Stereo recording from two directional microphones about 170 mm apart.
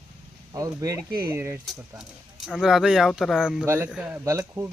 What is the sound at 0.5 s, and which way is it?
Speech, 20° right (ahead or behind).